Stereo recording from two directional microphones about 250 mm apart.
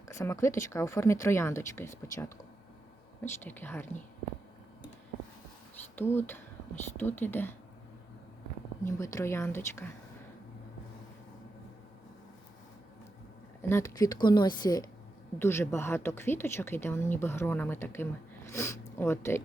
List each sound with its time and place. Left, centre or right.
0.1 s speech: centre
3.4 s speech: centre
6.0 s speech: centre
8.8 s speech: centre
13.6 s speech: centre